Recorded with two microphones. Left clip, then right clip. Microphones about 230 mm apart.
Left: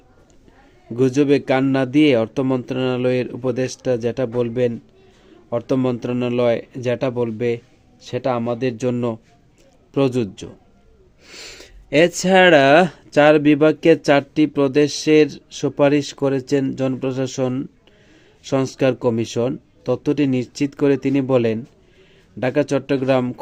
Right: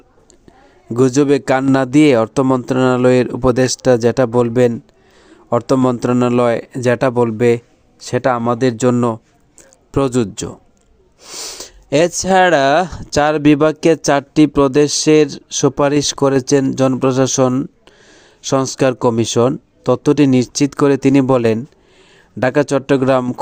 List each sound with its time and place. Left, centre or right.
0.9 s speech: right
11.2 s speech: centre